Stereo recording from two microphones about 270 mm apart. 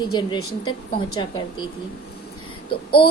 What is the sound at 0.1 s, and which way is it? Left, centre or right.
Speech, centre.